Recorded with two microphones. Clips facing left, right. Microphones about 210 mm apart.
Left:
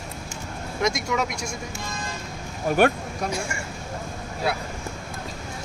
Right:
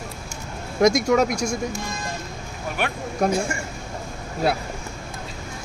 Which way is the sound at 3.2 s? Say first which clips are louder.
Right 8 dB; 50° right (ahead or behind).